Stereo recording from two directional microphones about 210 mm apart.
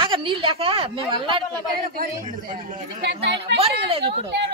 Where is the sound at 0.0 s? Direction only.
25° right (ahead or behind).